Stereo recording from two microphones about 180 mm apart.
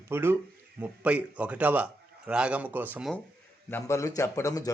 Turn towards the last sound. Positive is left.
turn(degrees=20)  # may be behind; listen again after turning